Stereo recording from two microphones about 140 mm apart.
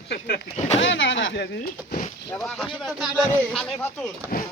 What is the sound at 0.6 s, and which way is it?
Speech, 55° left (ahead or behind).